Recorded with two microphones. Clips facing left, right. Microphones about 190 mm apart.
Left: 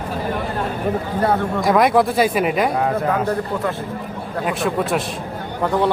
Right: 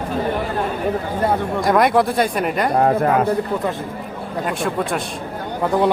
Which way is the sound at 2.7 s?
50° right (ahead or behind).